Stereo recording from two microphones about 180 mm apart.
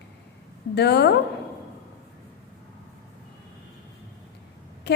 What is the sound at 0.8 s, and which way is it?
Speech, 70° left (ahead or behind).